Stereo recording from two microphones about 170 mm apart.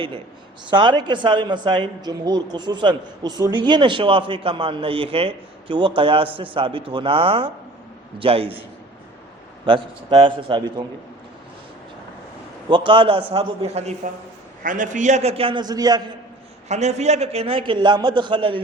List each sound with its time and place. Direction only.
0.7 s a man's voice: 30° right (ahead or behind)
9.6 s speech: 30° right (ahead or behind)
12.7 s a man's voice: 30° right (ahead or behind)
14.6 s a man's voice: 50° right (ahead or behind); by 16.1 s 25° right (ahead or behind)
16.6 s a man's voice: 40° right (ahead or behind)